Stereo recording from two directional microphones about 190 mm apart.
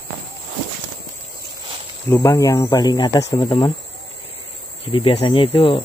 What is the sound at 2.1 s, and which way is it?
Speech, 15° left (ahead or behind).